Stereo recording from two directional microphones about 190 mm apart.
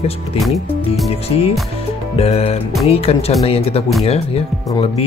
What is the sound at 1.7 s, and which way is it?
Music, 30° left (ahead or behind).